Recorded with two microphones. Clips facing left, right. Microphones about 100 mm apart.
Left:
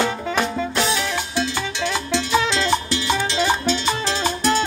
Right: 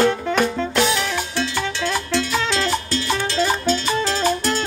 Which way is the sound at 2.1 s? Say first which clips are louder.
Left 1 dB; 15° left (ahead or behind).